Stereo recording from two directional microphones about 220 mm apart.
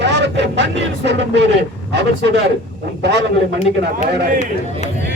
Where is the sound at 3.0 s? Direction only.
50° right (ahead or behind).